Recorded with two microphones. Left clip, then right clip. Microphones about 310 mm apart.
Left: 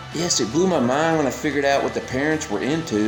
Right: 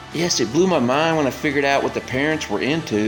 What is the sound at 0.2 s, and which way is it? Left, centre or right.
Speech, centre.